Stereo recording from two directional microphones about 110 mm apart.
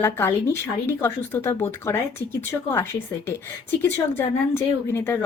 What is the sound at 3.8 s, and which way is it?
Speech, 25° left (ahead or behind).